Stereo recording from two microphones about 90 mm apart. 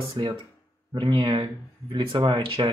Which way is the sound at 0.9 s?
75° right (ahead or behind).